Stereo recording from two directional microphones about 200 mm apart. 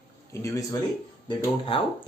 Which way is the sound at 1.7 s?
25° left (ahead or behind).